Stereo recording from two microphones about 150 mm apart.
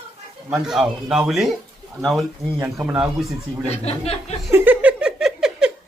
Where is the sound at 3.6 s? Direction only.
45° left (ahead or behind).